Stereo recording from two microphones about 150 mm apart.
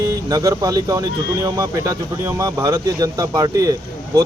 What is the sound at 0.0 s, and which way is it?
Speech, 25° right (ahead or behind).